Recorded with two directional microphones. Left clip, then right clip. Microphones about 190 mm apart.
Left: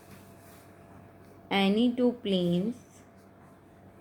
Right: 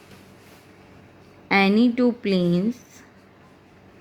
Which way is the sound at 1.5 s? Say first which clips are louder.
Right 8 dB; 55° right (ahead or behind).